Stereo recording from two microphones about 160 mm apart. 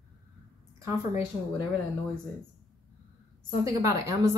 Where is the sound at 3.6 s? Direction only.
20° right (ahead or behind).